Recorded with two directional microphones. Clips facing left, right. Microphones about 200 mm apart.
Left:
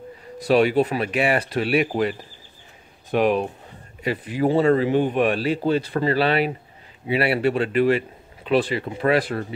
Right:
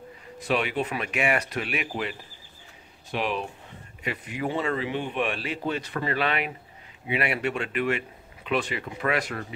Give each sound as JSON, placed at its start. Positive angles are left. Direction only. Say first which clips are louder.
{"t": 0.4, "sound": "speech", "louder": "left 9 dB", "side_deg": 40}
{"t": 4.0, "sound": "speech", "louder": "left 9 dB", "side_deg": 35}